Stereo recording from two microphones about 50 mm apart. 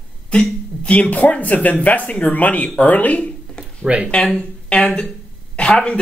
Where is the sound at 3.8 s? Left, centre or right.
Centre.